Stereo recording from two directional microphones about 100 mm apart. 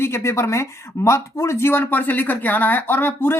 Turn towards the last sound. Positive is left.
turn(degrees=20)  # may be behind; listen again after turning